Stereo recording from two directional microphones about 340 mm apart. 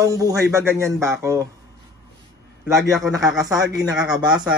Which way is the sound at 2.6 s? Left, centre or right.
Centre.